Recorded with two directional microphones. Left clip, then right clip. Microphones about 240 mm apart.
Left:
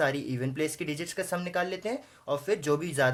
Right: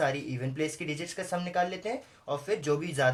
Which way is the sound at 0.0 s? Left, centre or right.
Left.